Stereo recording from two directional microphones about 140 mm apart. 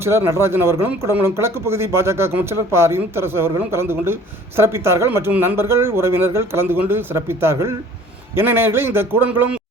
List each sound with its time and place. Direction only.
0.0 s speech: 20° right (ahead or behind)